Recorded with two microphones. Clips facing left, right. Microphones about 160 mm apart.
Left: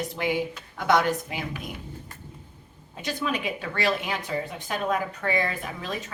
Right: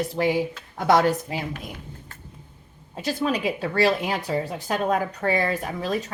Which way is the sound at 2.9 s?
35° right (ahead or behind).